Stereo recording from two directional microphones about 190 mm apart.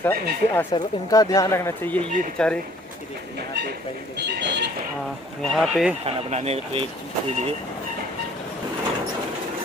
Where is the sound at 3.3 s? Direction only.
60° right (ahead or behind).